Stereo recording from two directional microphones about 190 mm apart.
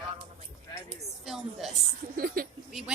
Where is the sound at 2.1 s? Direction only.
50° right (ahead or behind).